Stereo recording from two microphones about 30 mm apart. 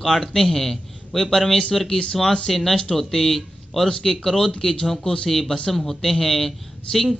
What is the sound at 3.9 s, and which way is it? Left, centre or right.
Speech, centre.